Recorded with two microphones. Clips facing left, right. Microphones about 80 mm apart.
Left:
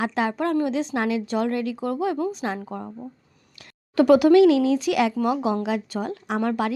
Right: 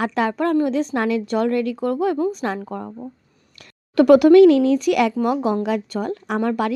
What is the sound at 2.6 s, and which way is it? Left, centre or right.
Speech, right.